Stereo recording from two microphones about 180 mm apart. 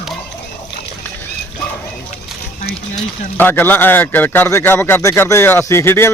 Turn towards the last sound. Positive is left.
turn(degrees=15)  # may be behind; listen again after turning